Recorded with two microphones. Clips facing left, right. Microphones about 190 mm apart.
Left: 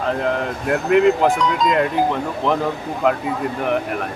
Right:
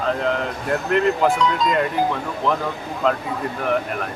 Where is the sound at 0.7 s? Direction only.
10° left (ahead or behind).